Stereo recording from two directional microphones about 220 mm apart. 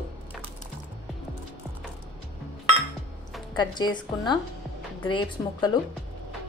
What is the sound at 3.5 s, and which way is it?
A woman's voice, 20° left (ahead or behind).